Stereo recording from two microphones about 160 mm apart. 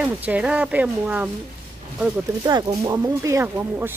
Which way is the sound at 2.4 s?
25° right (ahead or behind).